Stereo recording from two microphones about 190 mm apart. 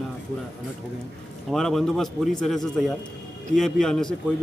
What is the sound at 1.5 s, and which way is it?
A man's voice, centre (ahead or behind).